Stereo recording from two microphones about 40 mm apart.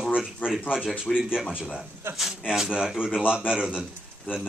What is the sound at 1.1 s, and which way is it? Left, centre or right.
Speech, centre.